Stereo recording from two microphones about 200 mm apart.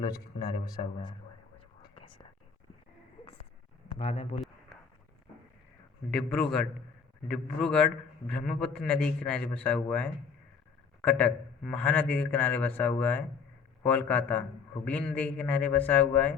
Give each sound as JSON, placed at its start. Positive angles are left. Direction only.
{"t": 0.6, "sound": "a man's voice", "side_deg": 20}
{"t": 1.5, "sound": "whispering", "side_deg": 25}
{"t": 3.8, "sound": "speech", "side_deg": 30}
{"t": 6.1, "sound": "a man's voice", "side_deg": 5}